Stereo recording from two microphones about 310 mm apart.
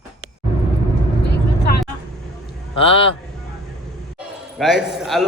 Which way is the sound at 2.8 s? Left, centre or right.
Centre.